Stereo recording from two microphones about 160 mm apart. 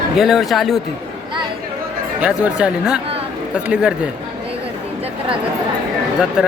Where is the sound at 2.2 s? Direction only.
5° right (ahead or behind).